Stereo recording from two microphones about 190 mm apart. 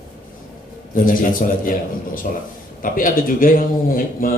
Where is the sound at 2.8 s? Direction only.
45° left (ahead or behind).